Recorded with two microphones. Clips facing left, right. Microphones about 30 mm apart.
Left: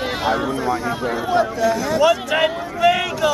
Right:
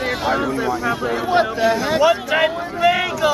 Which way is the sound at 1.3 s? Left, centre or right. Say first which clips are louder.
Right 1 dB; right.